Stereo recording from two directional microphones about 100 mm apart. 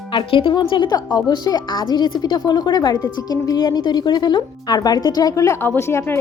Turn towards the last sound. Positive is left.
turn(degrees=25)  # may be behind; listen again after turning